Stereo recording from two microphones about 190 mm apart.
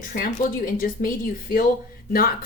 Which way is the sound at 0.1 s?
50° left (ahead or behind).